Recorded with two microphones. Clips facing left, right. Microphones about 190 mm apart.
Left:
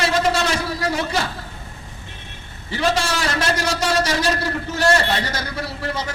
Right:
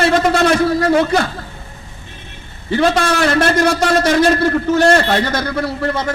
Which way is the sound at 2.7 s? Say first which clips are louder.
Right 7 dB; 55° right (ahead or behind).